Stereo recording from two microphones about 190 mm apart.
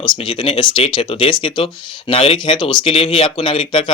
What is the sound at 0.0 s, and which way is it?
Speech, 25° left (ahead or behind).